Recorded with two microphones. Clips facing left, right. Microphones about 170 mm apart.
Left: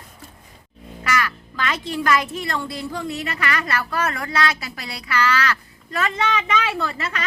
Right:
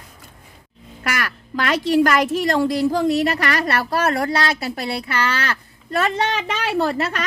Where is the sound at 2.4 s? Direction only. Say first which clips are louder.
Right 10 dB; 40° right (ahead or behind).